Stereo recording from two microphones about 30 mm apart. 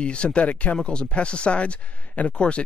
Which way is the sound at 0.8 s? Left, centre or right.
Left.